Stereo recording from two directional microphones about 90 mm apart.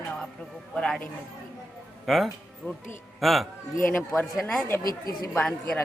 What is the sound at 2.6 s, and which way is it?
Speech, 25° left (ahead or behind).